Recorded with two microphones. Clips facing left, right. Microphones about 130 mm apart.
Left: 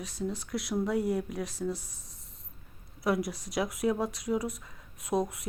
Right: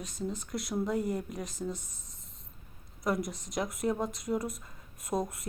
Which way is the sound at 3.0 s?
5° left (ahead or behind).